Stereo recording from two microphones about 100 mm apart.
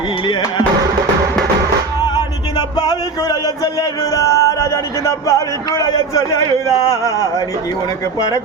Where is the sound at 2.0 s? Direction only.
45° left (ahead or behind).